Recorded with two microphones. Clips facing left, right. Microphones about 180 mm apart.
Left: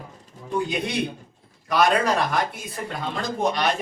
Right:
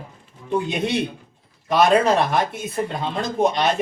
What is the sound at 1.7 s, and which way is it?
Speech, 25° right (ahead or behind).